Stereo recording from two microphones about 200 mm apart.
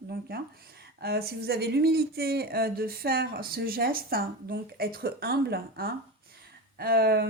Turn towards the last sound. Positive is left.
turn(degrees=-50)  # may be behind; listen again after turning